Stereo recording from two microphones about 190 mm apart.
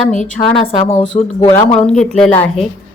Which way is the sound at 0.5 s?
35° left (ahead or behind).